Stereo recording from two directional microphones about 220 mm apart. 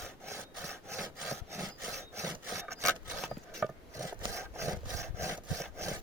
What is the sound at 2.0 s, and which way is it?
Sawing, 10° right (ahead or behind).